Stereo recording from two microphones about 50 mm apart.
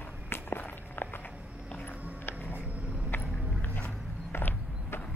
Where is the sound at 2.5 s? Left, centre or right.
Right.